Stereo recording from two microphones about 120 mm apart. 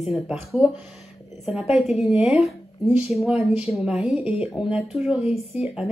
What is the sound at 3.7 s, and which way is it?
A woman's voice, 5° right (ahead or behind).